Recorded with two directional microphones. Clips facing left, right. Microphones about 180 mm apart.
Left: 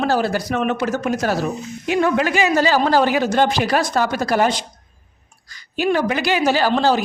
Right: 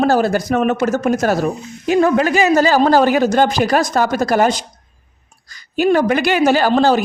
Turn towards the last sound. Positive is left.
turn(degrees=-50)  # may be behind; listen again after turning